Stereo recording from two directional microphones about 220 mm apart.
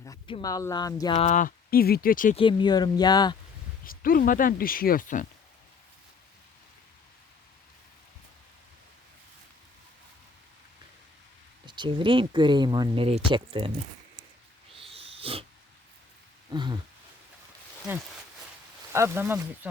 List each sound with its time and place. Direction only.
0.0 s speech: 20° left (ahead or behind)
1.3 s speech: 35° left (ahead or behind)
2.3 s speech: 25° left (ahead or behind)
3.8 s speech: 40° left (ahead or behind)
11.6 s speech: 20° right (ahead or behind)
14.7 s wheeze: 25° right (ahead or behind)
16.5 s a sound: 20° right (ahead or behind)
18.9 s speech: 10° right (ahead or behind)